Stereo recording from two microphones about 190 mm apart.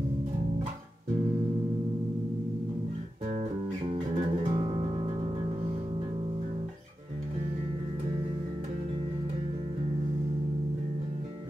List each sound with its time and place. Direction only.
4.5 s music: 20° right (ahead or behind)